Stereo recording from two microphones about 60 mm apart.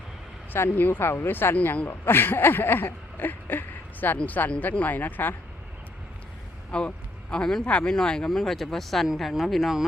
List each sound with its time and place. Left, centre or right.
0.7 s speech: left
1.6 s speech: left
1.9 s speech: left
6.7 s a man's voice: centre
8.3 s speech: centre